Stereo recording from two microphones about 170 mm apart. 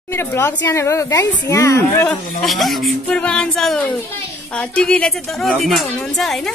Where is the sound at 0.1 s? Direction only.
15° left (ahead or behind).